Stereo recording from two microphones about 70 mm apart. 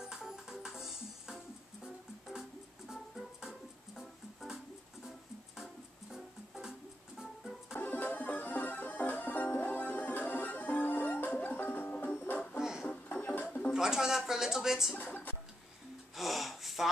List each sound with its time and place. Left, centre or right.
0.0 s music: centre
2.9 s music: centre
6.1 s music: centre
7.7 s music: left
12.5 s music: centre
12.8 s music: centre
13.7 s speech: centre
15.0 s a sound: left
16.2 s gasp: centre